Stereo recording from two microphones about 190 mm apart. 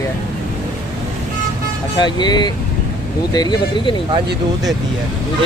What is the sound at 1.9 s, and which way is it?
Speech, 20° left (ahead or behind).